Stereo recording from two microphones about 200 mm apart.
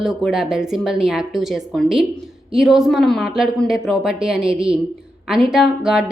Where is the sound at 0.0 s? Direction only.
Centre (ahead or behind).